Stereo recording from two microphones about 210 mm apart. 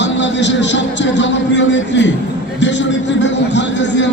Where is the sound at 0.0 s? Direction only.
60° left (ahead or behind).